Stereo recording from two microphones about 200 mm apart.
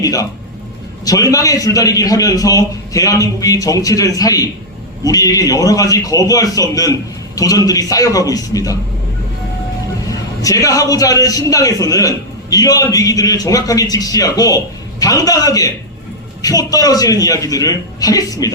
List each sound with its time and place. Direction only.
0.0 s a man's voice: 15° left (ahead or behind)
10.1 s a man's voice: 15° left (ahead or behind)